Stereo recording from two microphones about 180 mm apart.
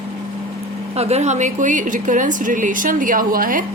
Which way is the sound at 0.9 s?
35° right (ahead or behind).